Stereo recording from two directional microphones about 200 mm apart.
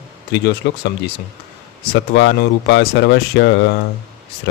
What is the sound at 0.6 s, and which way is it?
Speech, 60° left (ahead or behind).